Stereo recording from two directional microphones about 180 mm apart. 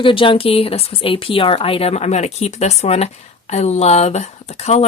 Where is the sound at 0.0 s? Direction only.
30° left (ahead or behind).